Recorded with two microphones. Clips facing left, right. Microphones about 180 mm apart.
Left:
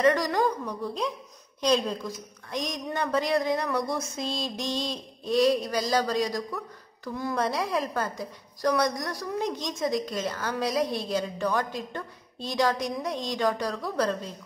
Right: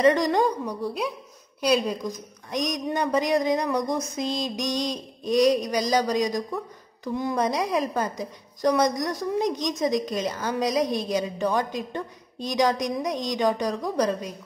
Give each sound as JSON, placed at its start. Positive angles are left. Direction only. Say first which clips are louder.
{"t": 0.0, "sound": "a woman's voice", "louder": "right 3 dB", "side_deg": -20}